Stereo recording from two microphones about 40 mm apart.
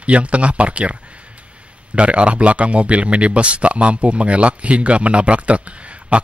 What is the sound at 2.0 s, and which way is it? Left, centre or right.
Speech, right.